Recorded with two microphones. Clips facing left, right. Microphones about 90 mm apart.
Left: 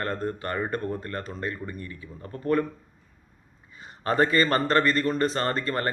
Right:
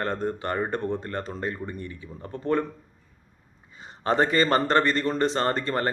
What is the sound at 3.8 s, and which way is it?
A man's voice, 25° right (ahead or behind).